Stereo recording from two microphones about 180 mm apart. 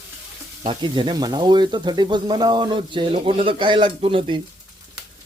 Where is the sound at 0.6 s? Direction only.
25° right (ahead or behind).